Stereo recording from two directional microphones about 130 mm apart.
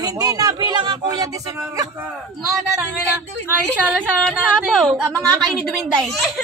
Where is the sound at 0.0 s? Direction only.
30° right (ahead or behind).